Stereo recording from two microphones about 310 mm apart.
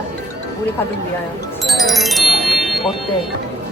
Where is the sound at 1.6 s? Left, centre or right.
Centre.